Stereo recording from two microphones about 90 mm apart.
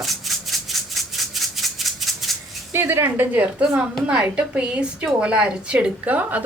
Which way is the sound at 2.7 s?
25° right (ahead or behind).